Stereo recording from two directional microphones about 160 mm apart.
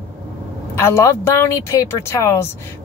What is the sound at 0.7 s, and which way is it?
Speech, 15° left (ahead or behind).